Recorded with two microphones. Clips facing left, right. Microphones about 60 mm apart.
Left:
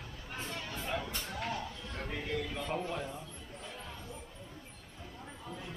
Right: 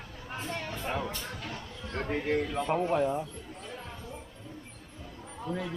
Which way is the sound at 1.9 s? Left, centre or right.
Right.